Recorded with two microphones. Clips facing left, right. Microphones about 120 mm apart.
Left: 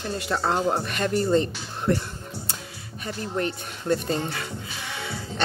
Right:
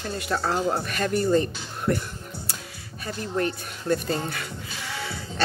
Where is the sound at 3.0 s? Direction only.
25° left (ahead or behind).